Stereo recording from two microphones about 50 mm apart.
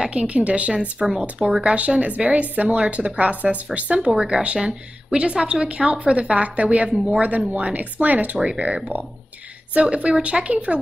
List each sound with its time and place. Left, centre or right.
0.1 s a woman's voice: right
0.9 s a woman's voice: centre